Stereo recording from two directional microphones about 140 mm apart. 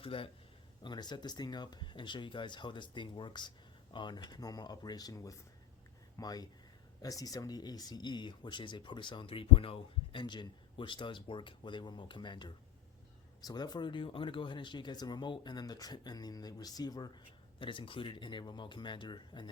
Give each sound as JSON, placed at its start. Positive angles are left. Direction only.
{"t": 0.0, "sound": "speech", "side_deg": 40}